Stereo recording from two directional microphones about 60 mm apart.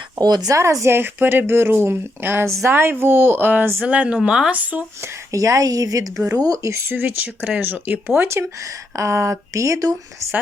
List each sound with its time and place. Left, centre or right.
0.2 s speech: right
0.6 s speech: right
0.9 s a woman's voice: right; by 4.5 s centre
4.5 s a woman's voice: right
5.3 s speech: right
6.6 s speech: right
6.9 s speech: right
9.0 s speech: right